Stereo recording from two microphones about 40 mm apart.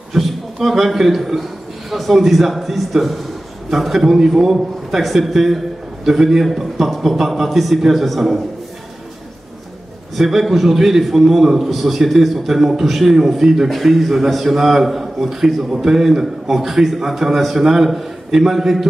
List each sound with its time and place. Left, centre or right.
0.1 s a man's voice: centre
10.1 s a man's voice: centre